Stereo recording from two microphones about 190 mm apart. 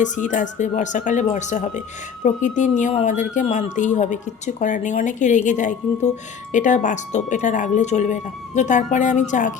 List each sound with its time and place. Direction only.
0.0 s speech: 40° left (ahead or behind)